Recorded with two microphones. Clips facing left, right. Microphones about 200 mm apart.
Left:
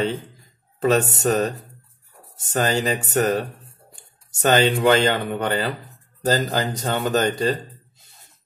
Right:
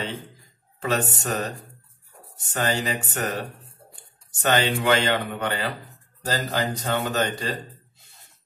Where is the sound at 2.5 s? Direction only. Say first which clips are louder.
Left 4 dB; 40° left (ahead or behind).